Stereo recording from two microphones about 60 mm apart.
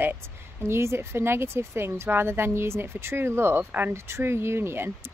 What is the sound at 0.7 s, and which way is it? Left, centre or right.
Speech, right.